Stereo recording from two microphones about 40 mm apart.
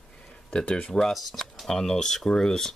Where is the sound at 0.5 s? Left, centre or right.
Left.